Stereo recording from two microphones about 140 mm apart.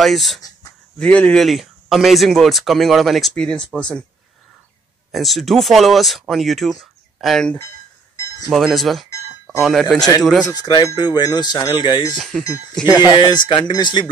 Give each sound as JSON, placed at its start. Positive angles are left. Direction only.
{"t": 0.0, "sound": "speech", "side_deg": 0}
{"t": 5.1, "sound": "speech", "side_deg": 0}
{"t": 10.5, "sound": "speech", "side_deg": 25}
{"t": 12.2, "sound": "speech", "side_deg": 0}
{"t": 12.8, "sound": "speech", "side_deg": 30}